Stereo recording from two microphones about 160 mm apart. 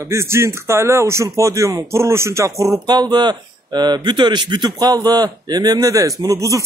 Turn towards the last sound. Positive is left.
turn(degrees=-20)  # may be behind; listen again after turning